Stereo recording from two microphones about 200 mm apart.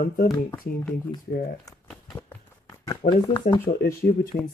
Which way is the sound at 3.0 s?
40° left (ahead or behind).